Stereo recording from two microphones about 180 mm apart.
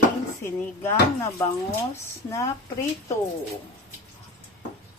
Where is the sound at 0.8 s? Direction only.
15° left (ahead or behind).